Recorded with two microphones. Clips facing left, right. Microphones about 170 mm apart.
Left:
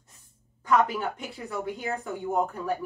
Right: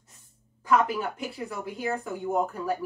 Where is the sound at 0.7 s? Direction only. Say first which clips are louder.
Even; centre (ahead or behind).